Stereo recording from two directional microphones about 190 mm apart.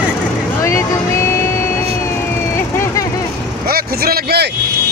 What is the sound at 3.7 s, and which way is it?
Speech, 50° right (ahead or behind).